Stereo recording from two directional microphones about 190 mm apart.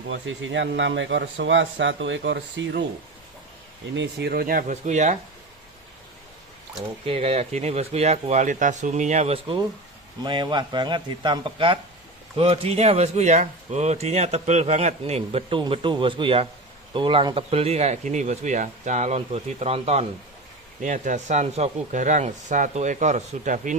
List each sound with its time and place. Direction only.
0.1 s speech: 80° right; by 2.8 s 65° right (ahead or behind)
3.9 s speech: 65° right (ahead or behind); by 5.1 s 40° right (ahead or behind)
7.0 s a man's voice: 30° right (ahead or behind)